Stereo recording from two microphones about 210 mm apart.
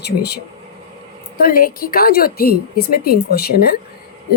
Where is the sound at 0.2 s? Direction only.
50° left (ahead or behind).